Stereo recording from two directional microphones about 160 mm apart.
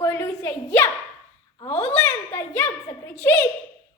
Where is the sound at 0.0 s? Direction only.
15° left (ahead or behind).